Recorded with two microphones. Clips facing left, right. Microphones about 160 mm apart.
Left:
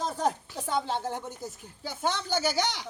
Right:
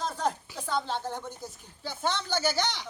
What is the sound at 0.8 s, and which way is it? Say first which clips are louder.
Speech: left 2 dB; 15° left (ahead or behind).